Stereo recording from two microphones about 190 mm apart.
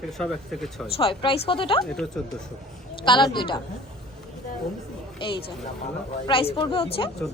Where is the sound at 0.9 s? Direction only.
30° left (ahead or behind).